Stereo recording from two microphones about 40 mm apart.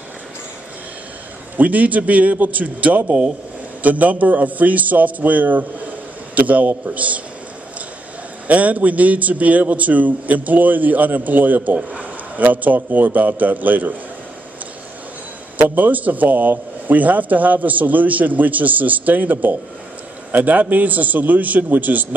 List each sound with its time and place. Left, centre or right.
1.6 s a man's voice: right
8.5 s a man's voice: right
11.7 s speech: right
12.4 s a man's voice: right
15.7 s a man's voice: right